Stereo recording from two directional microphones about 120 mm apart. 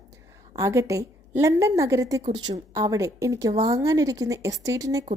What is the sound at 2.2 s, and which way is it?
A woman's voice, 40° right (ahead or behind).